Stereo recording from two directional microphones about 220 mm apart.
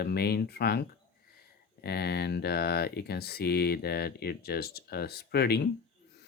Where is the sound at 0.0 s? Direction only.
45° left (ahead or behind).